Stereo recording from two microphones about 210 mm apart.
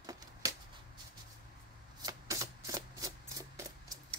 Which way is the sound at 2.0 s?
15° right (ahead or behind).